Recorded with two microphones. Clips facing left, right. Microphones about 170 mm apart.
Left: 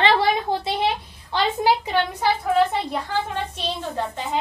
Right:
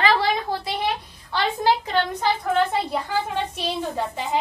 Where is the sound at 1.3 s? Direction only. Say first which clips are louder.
Left 1 dB; 15° left (ahead or behind).